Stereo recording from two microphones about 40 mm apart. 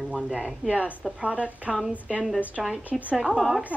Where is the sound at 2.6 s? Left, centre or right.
Centre.